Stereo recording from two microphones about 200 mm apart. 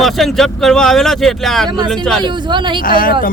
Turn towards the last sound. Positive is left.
turn(degrees=45)  # may be behind; listen again after turning